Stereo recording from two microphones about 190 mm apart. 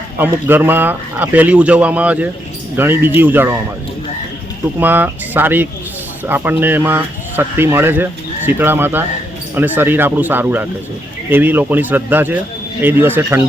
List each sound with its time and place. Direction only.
0.2 s speech: 10° right (ahead or behind)
4.8 s speech: 10° right (ahead or behind)